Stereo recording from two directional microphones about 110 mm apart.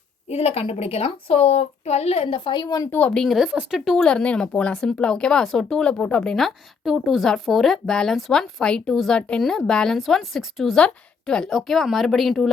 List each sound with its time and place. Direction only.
0.3 s a woman's voice: 70° left (ahead or behind); by 2.9 s 35° left (ahead or behind)
2.9 s speech: 10° left (ahead or behind); by 3.8 s 5° right (ahead or behind)
3.8 s speech: 5° left (ahead or behind)